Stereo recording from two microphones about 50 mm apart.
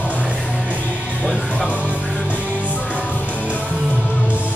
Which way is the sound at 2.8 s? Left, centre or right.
Right.